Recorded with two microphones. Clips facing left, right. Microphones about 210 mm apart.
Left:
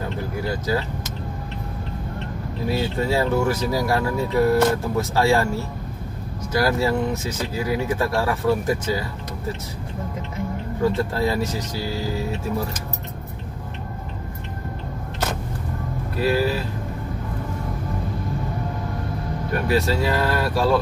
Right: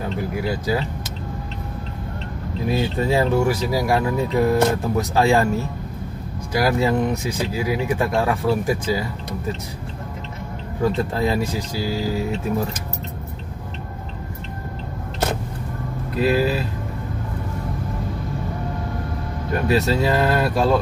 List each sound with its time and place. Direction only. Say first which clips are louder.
0.4 s speech: even; 15° right (ahead or behind)
2.7 s speech: right 2 dB; 15° right (ahead or behind)
6.5 s speech: right 1 dB; 15° right (ahead or behind)
10.8 s speech: right 1 dB; 20° right (ahead or behind)
16.2 s speech: right 2 dB; 20° right (ahead or behind)
19.7 s speech: right 2 dB; 20° right (ahead or behind)